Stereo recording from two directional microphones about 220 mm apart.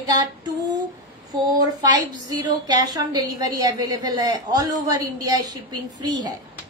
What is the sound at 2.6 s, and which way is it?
A woman's voice, 20° right (ahead or behind).